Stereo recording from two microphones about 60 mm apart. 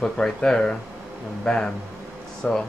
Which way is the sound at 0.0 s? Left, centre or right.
Centre.